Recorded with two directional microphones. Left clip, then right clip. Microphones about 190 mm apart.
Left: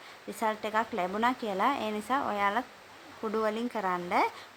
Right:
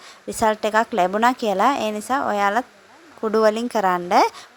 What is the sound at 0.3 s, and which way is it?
A woman's voice, 40° right (ahead or behind).